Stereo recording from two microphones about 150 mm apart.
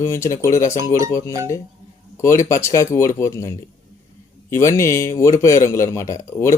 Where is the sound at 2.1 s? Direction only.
20° left (ahead or behind).